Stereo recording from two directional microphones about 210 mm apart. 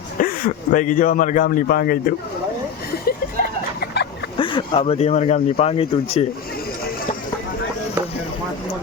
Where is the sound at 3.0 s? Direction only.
50° left (ahead or behind).